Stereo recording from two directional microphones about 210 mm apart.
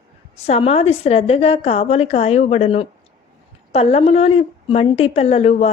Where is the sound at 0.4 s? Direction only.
30° left (ahead or behind).